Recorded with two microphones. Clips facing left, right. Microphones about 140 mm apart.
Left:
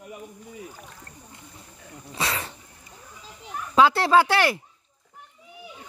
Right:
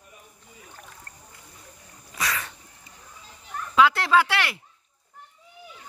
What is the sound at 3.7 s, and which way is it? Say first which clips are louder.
Speech: left 2 dB; 35° left (ahead or behind).